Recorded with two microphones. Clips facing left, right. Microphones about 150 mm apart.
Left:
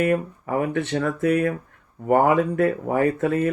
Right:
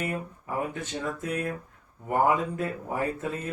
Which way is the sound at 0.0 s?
70° left (ahead or behind).